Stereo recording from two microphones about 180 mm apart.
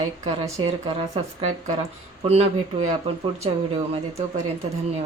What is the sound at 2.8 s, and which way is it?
Speech, 35° right (ahead or behind).